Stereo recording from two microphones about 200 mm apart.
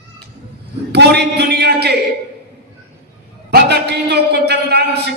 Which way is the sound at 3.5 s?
55° right (ahead or behind).